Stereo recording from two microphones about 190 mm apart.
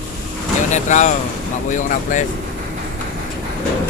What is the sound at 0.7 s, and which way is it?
Speech, 40° left (ahead or behind).